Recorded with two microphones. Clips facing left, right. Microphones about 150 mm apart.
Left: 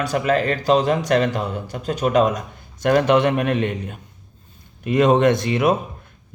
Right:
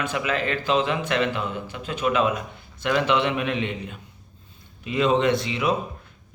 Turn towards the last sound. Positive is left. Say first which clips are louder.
# left 5 dB
turn(degrees=50)  # may be behind; listen again after turning